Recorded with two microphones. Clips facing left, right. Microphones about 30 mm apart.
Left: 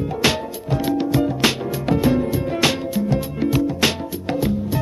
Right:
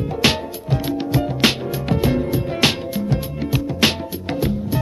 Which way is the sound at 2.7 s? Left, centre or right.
Right.